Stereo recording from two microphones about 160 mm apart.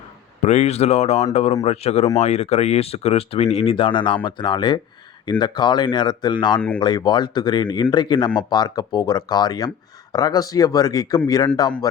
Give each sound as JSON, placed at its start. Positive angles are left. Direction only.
{"t": 0.4, "sound": "speech", "side_deg": 45}